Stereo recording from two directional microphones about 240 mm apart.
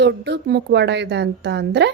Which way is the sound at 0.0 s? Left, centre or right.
Right.